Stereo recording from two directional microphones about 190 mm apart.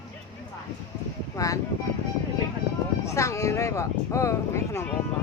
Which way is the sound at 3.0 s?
15° left (ahead or behind).